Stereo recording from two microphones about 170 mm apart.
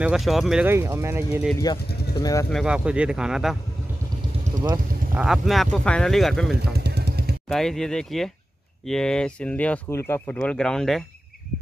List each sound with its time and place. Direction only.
0.0 s speech: centre (ahead or behind)
0.7 s speech: 15° right (ahead or behind)
2.1 s speech: 20° left (ahead or behind)
2.5 s speech: 5° right (ahead or behind)
5.1 s speech: 5° right (ahead or behind)
6.7 s drum: 70° right (ahead or behind)
7.4 s speech: 5° left (ahead or behind)